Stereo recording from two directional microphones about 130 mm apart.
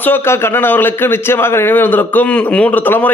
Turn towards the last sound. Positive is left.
turn(degrees=15)  # may be behind; listen again after turning